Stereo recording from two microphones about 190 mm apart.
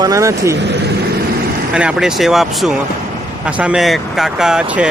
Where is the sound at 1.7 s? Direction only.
5° right (ahead or behind).